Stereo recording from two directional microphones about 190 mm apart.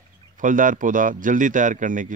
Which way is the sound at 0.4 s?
45° right (ahead or behind).